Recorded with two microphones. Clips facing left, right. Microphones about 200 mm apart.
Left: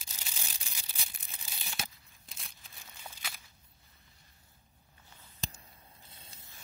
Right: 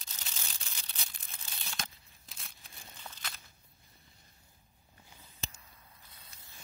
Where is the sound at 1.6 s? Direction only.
15° left (ahead or behind).